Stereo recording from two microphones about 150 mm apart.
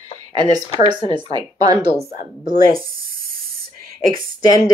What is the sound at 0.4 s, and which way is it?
Speech, 25° right (ahead or behind).